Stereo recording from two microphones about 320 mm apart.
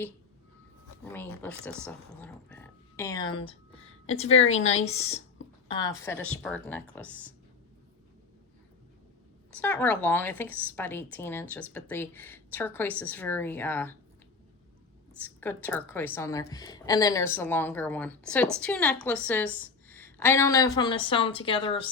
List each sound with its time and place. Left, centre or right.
1.0 s a woman's voice: centre
9.6 s a woman's voice: centre
15.2 s a woman's voice: centre